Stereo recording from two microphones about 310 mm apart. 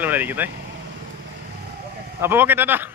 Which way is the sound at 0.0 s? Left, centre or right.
Centre.